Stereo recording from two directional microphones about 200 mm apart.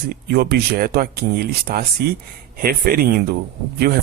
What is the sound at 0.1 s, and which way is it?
Speech, 50° right (ahead or behind).